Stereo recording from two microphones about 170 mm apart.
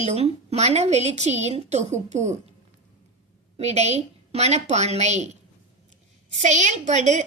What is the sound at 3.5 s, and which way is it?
A woman's voice, 40° right (ahead or behind).